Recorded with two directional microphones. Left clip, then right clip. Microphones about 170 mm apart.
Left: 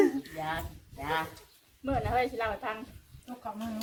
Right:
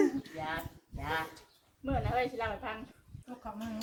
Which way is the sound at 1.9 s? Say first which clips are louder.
Left 3 dB; 25° left (ahead or behind).